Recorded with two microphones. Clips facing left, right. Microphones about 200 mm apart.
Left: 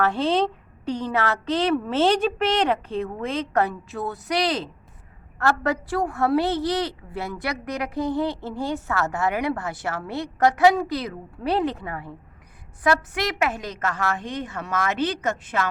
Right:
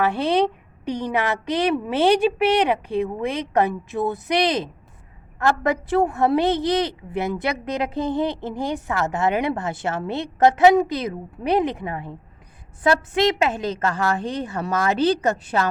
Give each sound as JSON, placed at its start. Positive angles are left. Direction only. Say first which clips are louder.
{"t": 0.0, "sound": "a woman's voice", "louder": "right 2 dB", "side_deg": -15}